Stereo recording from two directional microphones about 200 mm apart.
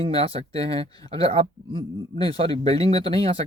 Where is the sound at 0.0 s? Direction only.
30° right (ahead or behind).